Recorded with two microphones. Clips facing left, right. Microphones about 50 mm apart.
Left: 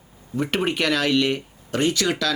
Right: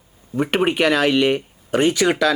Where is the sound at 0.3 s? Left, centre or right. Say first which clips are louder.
Right 5 dB; centre.